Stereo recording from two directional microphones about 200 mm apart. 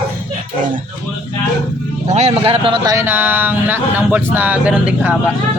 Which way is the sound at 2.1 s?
30° right (ahead or behind).